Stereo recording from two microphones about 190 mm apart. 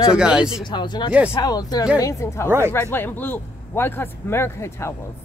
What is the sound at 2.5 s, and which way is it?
Speech, 15° right (ahead or behind).